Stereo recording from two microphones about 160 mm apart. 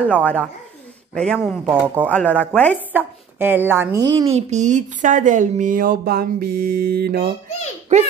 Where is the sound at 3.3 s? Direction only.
10° right (ahead or behind).